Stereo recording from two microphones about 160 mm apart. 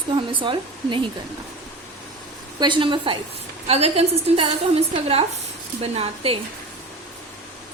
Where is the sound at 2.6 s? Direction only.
30° right (ahead or behind).